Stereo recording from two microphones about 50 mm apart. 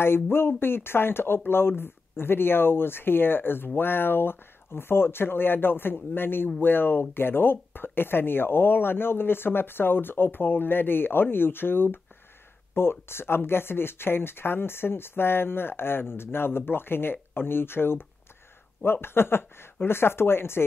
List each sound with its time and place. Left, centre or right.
0.0 s speech: left